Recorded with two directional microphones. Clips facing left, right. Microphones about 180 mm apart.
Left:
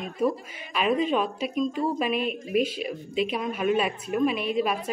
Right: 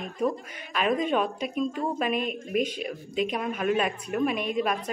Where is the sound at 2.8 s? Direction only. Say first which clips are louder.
Left 1 dB; 45° right (ahead or behind).